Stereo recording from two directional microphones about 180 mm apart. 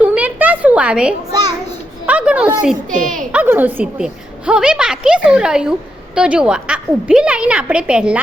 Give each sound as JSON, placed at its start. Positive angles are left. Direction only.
{"t": 0.0, "sound": "a sound", "side_deg": -10}
{"t": 2.9, "sound": "a woman's voice", "side_deg": -45}
{"t": 3.3, "sound": "a woman's voice", "side_deg": -10}